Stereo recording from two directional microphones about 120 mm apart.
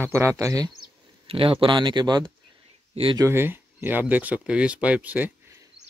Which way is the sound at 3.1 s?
25° right (ahead or behind).